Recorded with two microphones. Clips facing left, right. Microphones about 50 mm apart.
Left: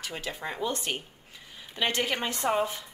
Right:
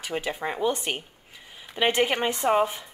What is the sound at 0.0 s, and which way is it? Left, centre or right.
Speech, right.